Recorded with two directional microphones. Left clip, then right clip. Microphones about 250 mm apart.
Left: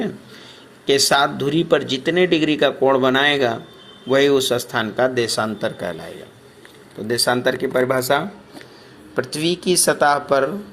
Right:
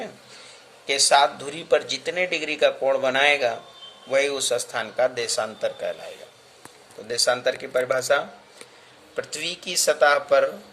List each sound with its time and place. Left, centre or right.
0.9 s speech: left
7.1 s speech: centre